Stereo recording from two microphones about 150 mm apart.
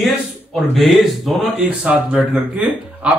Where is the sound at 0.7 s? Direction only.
Centre (ahead or behind).